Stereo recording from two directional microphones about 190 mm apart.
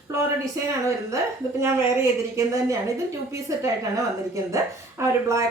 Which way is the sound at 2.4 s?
15° right (ahead or behind).